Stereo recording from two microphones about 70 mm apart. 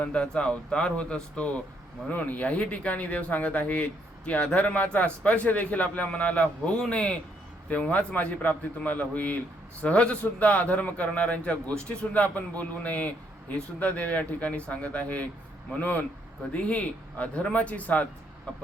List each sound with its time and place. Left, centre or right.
0.0 s a man's voice: centre